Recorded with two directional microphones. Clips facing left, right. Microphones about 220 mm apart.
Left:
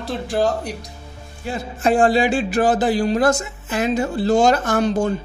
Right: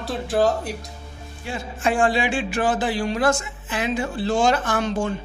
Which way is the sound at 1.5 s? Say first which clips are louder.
Left 5 dB; 40° left (ahead or behind).